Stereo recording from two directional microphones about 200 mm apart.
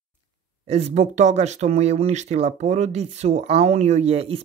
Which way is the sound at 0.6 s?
30° right (ahead or behind).